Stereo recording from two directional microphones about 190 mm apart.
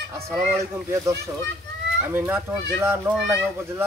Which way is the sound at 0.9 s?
15° right (ahead or behind).